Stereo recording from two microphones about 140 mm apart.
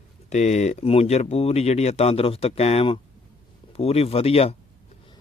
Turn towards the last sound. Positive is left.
turn(degrees=45)  # may be behind; listen again after turning